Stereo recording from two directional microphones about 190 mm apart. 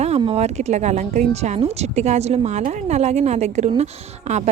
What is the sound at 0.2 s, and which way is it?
A woman's voice, 35° right (ahead or behind).